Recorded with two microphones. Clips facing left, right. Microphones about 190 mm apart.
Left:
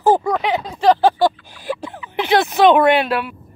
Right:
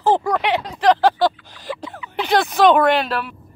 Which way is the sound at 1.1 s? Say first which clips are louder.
Left 2 dB; 10° left (ahead or behind).